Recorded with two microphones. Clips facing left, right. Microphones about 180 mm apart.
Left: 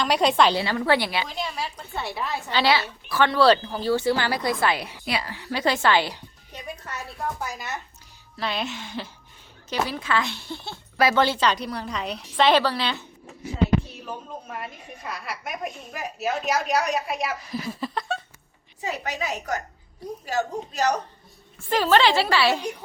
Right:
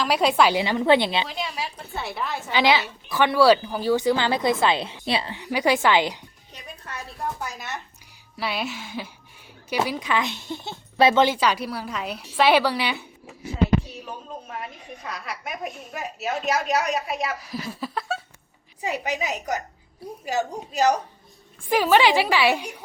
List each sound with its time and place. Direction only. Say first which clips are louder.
0.0 s speech: even; 5° right (ahead or behind)
0.5 s a woman's voice: right 3 dB; 20° right (ahead or behind)
2.0 s speech: even; centre (ahead or behind)
2.5 s a woman's voice: right 2 dB; 15° right (ahead or behind)
8.4 s a woman's voice: even; 5° right (ahead or behind)
15.0 s speech: even; 5° left (ahead or behind)
18.9 s a woman's voice: right 2 dB; 15° right (ahead or behind)